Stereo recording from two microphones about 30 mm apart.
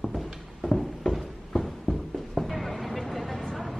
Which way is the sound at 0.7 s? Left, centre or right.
Centre.